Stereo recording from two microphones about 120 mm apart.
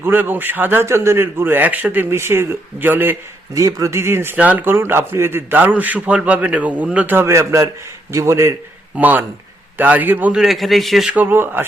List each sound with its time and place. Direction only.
0.0 s a man's voice: 15° right (ahead or behind)
3.5 s a man's voice: 30° right (ahead or behind); by 11.1 s centre (ahead or behind)
11.1 s a man's voice: 15° right (ahead or behind)